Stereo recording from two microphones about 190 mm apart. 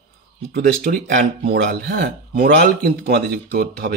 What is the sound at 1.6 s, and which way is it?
Speech, 40° right (ahead or behind).